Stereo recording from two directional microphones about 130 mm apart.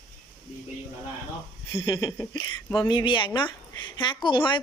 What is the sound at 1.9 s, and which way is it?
Speech, 25° left (ahead or behind).